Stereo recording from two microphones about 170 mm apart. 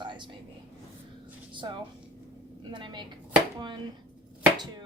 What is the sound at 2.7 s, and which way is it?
Speech, 25° right (ahead or behind).